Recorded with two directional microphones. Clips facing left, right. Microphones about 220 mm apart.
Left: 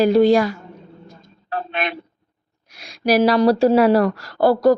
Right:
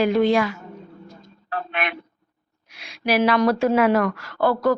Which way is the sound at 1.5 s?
35° left (ahead or behind).